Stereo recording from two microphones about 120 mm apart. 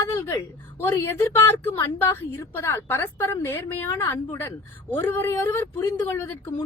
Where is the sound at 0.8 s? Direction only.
15° left (ahead or behind).